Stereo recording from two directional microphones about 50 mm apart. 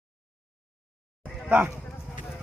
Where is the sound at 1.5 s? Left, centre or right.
Right.